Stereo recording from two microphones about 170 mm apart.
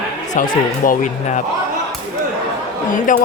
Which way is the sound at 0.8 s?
45° left (ahead or behind).